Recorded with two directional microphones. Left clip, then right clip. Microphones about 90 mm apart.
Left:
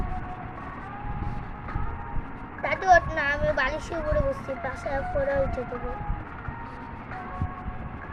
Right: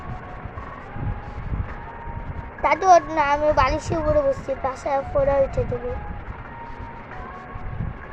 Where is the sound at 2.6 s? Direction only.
40° right (ahead or behind).